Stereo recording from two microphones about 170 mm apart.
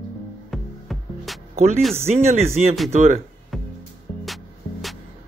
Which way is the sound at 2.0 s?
40° right (ahead or behind).